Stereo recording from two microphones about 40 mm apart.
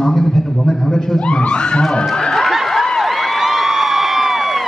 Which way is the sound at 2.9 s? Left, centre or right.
Centre.